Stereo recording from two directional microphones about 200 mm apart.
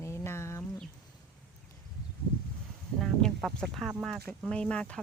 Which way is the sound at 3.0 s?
Centre (ahead or behind).